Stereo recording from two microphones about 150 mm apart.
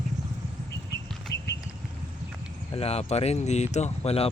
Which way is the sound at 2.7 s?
40° left (ahead or behind).